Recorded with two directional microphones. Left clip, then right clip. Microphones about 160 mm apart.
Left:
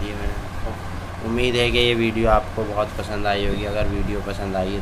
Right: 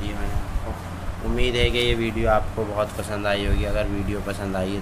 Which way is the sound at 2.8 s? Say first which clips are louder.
Left 1 dB; 30° right (ahead or behind).